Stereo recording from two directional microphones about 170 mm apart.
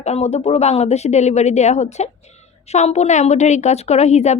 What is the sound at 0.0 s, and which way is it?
A woman's voice, 40° left (ahead or behind).